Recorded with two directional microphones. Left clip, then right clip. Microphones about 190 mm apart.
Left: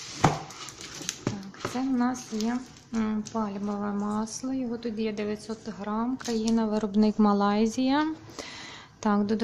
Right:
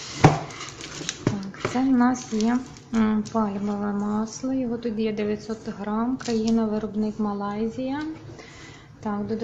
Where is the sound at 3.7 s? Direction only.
15° left (ahead or behind).